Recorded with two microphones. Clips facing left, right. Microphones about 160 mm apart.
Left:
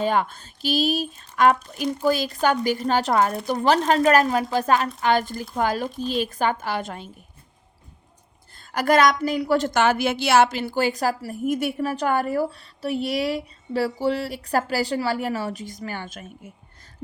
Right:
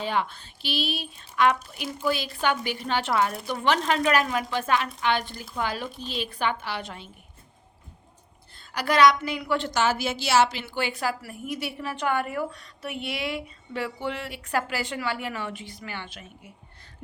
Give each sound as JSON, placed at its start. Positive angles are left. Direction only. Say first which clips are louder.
{"t": 0.0, "sound": "a woman's voice", "louder": "left 5 dB", "side_deg": 45}
{"t": 8.5, "sound": "a woman's voice", "louder": "left 4 dB", "side_deg": 45}